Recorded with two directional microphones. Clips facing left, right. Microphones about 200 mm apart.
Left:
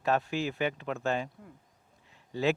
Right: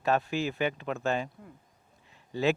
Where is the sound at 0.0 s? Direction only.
10° right (ahead or behind).